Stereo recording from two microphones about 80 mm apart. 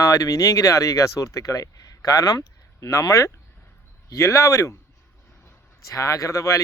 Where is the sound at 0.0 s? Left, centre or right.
Left.